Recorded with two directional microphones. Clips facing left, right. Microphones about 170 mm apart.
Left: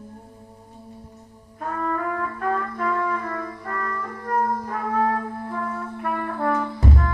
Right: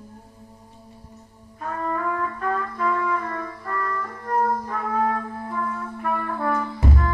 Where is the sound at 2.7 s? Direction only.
50° left (ahead or behind).